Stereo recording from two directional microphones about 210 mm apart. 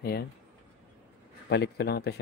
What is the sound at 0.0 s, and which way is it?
Speech, 50° left (ahead or behind).